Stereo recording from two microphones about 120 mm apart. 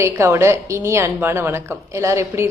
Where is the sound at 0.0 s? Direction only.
20° right (ahead or behind).